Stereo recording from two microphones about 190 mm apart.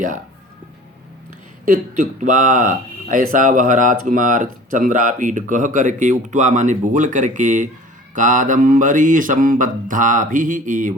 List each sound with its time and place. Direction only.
1.6 s mantra: 45° right (ahead or behind)
4.7 s speech: 45° right (ahead or behind)
8.1 s mantra: 40° right (ahead or behind)